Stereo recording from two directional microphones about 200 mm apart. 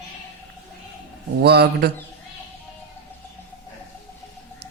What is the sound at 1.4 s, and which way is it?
Speech, 55° right (ahead or behind).